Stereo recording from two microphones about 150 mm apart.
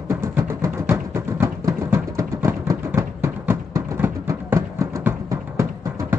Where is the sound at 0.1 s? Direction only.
15° right (ahead or behind).